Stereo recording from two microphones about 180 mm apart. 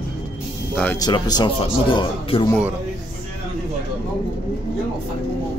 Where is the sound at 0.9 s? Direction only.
20° left (ahead or behind).